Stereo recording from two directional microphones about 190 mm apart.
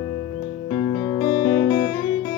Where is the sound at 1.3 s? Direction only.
45° left (ahead or behind).